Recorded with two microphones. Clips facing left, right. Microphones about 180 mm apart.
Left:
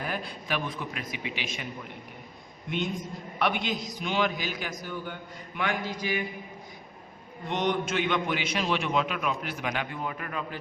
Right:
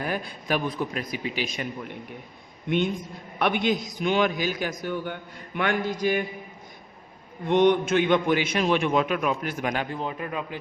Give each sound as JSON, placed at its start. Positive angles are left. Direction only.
{"t": 0.0, "sound": "a man's voice", "side_deg": -45}
{"t": 3.3, "sound": "a man's voice", "side_deg": -55}
{"t": 7.4, "sound": "a man's voice", "side_deg": -55}
{"t": 10.0, "sound": "a man's voice", "side_deg": -25}